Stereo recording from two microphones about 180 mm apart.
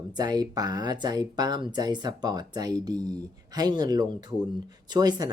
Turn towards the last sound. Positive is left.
turn(degrees=-20)  # may be behind; listen again after turning